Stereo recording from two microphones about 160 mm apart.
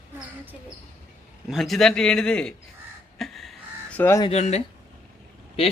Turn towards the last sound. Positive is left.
turn(degrees=35)  # may be behind; listen again after turning